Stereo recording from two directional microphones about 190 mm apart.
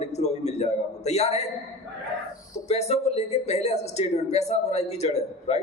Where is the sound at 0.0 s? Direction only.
35° left (ahead or behind).